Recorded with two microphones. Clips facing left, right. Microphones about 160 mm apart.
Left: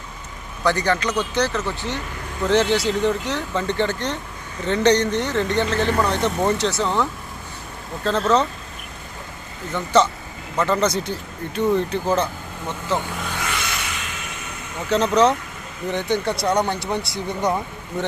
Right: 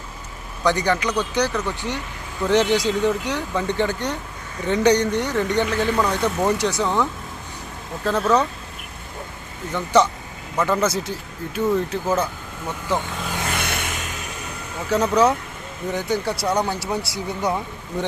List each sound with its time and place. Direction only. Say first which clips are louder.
0.6 s speech: even; 15° right (ahead or behind)
9.7 s speech: even; 15° right (ahead or behind)
13.5 s vehicle: right 2 dB; 55° right (ahead or behind)
14.8 s speech: left 1 dB; 10° right (ahead or behind)